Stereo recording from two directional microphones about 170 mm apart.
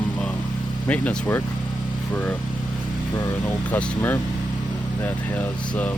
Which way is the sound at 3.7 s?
10° left (ahead or behind).